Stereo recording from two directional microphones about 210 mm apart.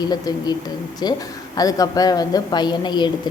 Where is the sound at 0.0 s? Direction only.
20° left (ahead or behind).